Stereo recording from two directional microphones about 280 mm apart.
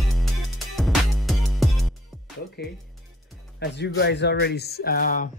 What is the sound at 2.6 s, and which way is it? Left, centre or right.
Speech, left.